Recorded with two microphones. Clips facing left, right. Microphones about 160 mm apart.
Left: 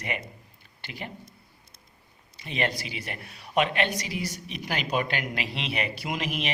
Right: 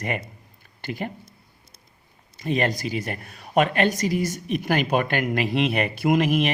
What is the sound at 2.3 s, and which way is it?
A man's voice, 45° right (ahead or behind).